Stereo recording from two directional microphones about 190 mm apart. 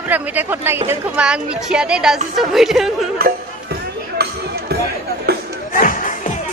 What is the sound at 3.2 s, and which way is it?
Music, 50° right (ahead or behind).